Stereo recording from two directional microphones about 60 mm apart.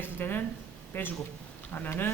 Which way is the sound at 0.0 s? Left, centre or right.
Left.